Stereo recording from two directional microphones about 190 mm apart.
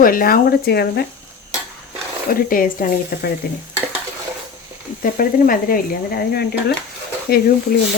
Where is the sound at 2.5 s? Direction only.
45° left (ahead or behind).